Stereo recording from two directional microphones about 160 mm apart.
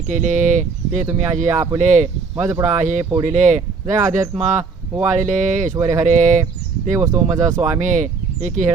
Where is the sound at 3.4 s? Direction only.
50° right (ahead or behind).